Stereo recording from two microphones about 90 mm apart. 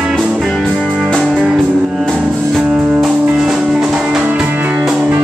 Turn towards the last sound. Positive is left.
turn(degrees=-20)  # may be behind; listen again after turning